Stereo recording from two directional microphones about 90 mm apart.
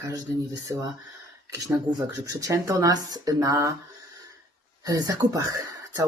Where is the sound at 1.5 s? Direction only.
40° right (ahead or behind).